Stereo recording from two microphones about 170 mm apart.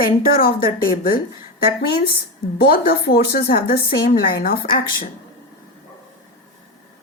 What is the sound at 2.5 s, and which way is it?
A woman's voice, 65° left (ahead or behind).